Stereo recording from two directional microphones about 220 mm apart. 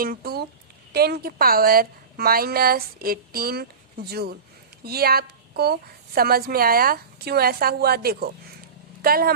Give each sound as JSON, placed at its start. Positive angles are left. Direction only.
{"t": 0.0, "sound": "a woman's voice", "side_deg": -45}